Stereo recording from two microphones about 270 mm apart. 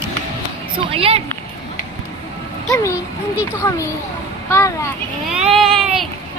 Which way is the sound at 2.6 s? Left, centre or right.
Centre.